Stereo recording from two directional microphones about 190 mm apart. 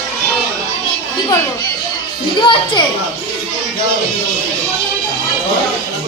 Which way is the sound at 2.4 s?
25° left (ahead or behind).